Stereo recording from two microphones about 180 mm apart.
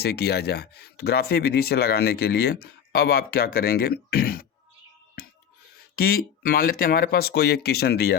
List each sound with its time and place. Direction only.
0.0 s speech: 65° left (ahead or behind)
6.0 s speech: 55° left (ahead or behind)